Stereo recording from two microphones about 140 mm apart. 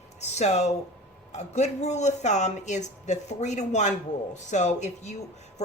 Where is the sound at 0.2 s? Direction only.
50° left (ahead or behind).